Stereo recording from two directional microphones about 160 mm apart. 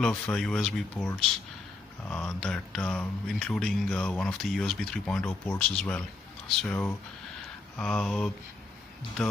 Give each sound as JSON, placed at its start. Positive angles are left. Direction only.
{"t": 0.0, "sound": "speech", "side_deg": 5}